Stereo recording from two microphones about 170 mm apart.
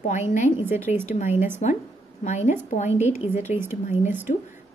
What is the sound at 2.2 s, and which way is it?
Speech, 45° left (ahead or behind).